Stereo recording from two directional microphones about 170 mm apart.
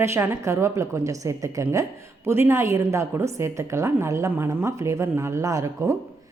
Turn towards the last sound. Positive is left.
turn(degrees=-20)  # may be behind; listen again after turning